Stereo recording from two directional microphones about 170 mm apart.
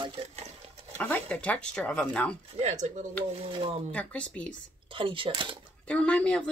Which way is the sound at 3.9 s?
10° left (ahead or behind).